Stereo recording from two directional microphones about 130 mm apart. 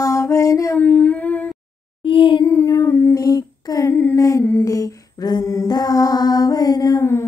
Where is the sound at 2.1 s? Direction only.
40° left (ahead or behind).